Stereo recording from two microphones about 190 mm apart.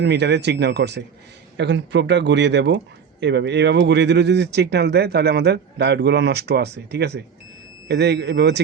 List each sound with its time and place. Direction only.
0.0 s speech: 60° right (ahead or behind)